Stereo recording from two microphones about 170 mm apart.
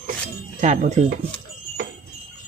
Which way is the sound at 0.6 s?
50° right (ahead or behind).